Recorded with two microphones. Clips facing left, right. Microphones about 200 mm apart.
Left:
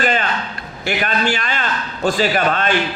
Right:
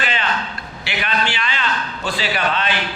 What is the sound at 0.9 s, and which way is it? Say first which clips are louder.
A man's voice: left 4 dB; 45° left (ahead or behind).